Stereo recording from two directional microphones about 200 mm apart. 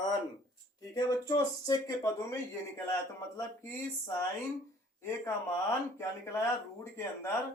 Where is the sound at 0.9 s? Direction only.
20° left (ahead or behind).